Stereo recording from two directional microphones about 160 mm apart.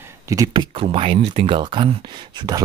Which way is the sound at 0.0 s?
20° right (ahead or behind).